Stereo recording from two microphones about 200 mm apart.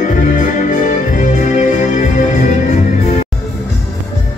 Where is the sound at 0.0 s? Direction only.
40° left (ahead or behind).